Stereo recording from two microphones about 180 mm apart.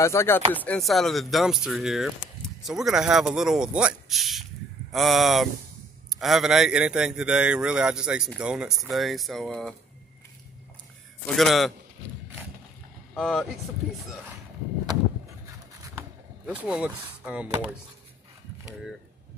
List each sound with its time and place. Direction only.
0.0 s speech: 15° left (ahead or behind)
0.7 s speech: centre (ahead or behind)
11.2 s speech: centre (ahead or behind)
13.1 s speech: centre (ahead or behind)
16.4 s speech: 5° right (ahead or behind)